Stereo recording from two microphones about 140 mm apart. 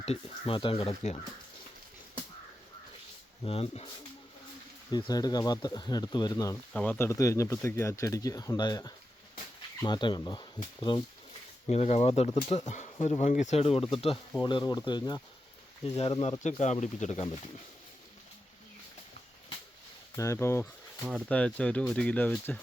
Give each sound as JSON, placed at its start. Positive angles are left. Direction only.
{"t": 0.0, "sound": "speech", "side_deg": 45}
{"t": 3.4, "sound": "speech", "side_deg": 45}
{"t": 4.9, "sound": "speech", "side_deg": 30}
{"t": 6.7, "sound": "speech", "side_deg": 10}
{"t": 7.1, "sound": "speech", "side_deg": 20}
{"t": 11.7, "sound": "speech", "side_deg": 50}
{"t": 14.4, "sound": "speech", "side_deg": 30}
{"t": 15.9, "sound": "speech", "side_deg": 45}
{"t": 16.4, "sound": "speech", "side_deg": 55}
{"t": 20.1, "sound": "speech", "side_deg": 20}